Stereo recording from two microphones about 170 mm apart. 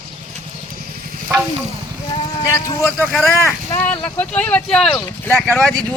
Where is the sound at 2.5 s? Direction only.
15° left (ahead or behind).